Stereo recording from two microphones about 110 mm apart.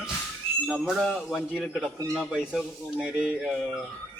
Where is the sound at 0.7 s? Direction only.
Centre (ahead or behind).